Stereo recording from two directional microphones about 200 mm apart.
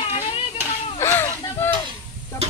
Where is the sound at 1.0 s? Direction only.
10° left (ahead or behind).